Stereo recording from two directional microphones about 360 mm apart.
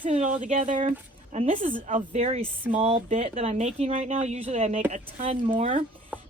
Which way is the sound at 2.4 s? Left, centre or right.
Centre.